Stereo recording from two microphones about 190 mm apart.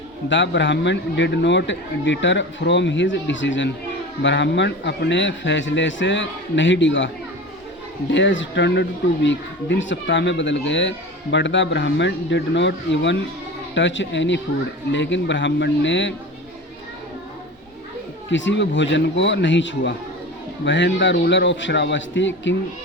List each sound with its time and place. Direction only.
0.3 s a child's voice: 70° left (ahead or behind)
8.1 s a child's voice: 75° left (ahead or behind)
18.3 s a child's voice: 75° left (ahead or behind)